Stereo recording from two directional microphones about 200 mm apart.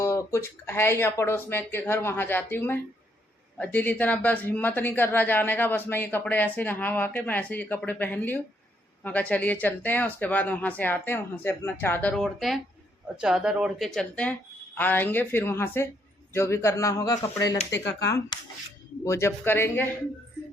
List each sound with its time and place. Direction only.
0.3 s speech: 15° left (ahead or behind)